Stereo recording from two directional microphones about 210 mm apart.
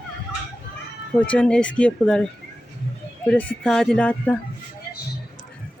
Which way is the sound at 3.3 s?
5° left (ahead or behind).